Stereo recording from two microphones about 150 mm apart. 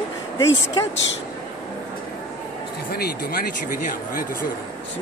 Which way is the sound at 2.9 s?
90° left.